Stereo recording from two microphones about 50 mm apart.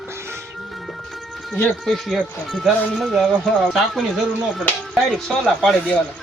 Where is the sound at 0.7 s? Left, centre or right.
Centre.